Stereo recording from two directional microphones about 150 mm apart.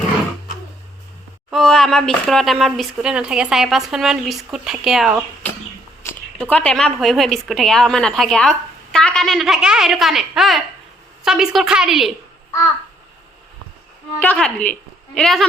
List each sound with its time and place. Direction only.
1.5 s a woman's voice: centre (ahead or behind)
6.0 s a sound: 15° left (ahead or behind)
6.4 s a woman's voice: 10° left (ahead or behind)
14.2 s a woman's voice: 5° left (ahead or behind)